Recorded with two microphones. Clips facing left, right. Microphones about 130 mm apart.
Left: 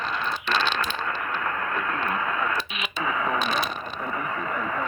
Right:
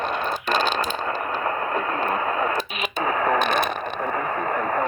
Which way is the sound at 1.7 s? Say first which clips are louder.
Right 4 dB; 40° right (ahead or behind).